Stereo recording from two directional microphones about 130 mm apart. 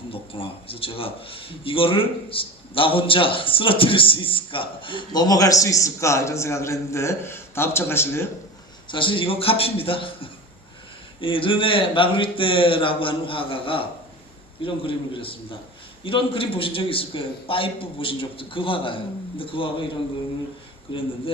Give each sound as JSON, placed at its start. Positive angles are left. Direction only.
{"t": 0.1, "sound": "a man's voice", "side_deg": 45}
{"t": 8.9, "sound": "a man's voice", "side_deg": 40}